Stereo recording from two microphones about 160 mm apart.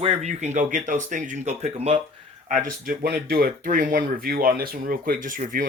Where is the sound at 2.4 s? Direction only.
55° right (ahead or behind).